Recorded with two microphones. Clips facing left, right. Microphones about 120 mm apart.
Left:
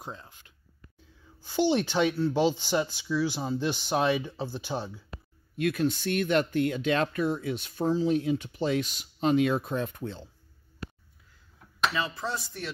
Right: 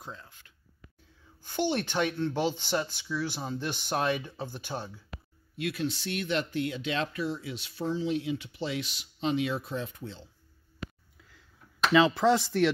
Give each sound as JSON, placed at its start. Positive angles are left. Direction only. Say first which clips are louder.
{"t": 0.0, "sound": "speech", "louder": "left 3 dB", "side_deg": 20}
{"t": 5.6, "sound": "speech", "louder": "left 5 dB", "side_deg": 50}
{"t": 11.9, "sound": "speech", "louder": "right 10 dB", "side_deg": -90}